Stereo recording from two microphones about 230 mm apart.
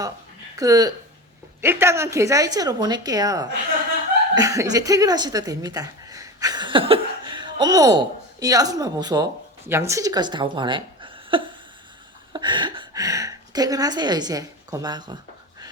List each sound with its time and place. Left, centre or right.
0.5 s a woman's voice: centre